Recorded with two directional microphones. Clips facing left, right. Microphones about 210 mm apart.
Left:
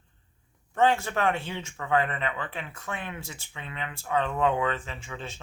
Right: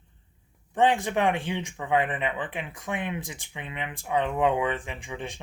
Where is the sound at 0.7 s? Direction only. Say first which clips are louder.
Right 1 dB; 15° right (ahead or behind).